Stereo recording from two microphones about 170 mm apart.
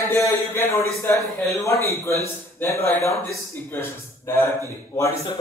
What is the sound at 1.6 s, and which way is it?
A man's voice, 15° left (ahead or behind).